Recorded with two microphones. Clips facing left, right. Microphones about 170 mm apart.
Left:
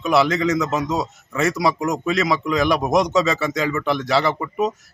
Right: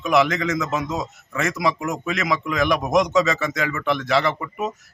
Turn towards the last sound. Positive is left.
turn(degrees=35)  # may be behind; listen again after turning